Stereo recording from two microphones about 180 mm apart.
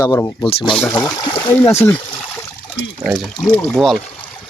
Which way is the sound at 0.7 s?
5° left (ahead or behind).